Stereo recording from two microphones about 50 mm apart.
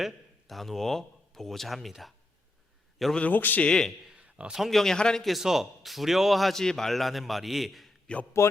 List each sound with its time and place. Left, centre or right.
0.0 s speech: centre
3.2 s a man's voice: left
3.6 s a man's voice: centre
4.1 s a sound: right
4.7 s a man's voice: centre
5.4 s a man's voice: centre
8.0 s a man's voice: left